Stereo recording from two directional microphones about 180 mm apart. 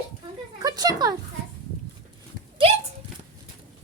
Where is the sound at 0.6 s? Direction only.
20° right (ahead or behind).